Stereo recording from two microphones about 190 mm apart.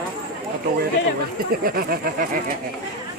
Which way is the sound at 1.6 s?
50° right (ahead or behind).